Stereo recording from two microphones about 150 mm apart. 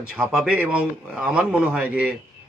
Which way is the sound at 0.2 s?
5° right (ahead or behind).